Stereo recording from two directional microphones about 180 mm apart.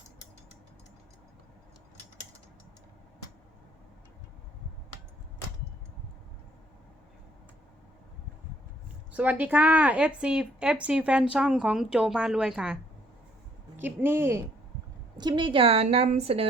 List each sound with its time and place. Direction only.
9.1 s speech: 10° right (ahead or behind)
15.2 s a woman's voice: 25° right (ahead or behind)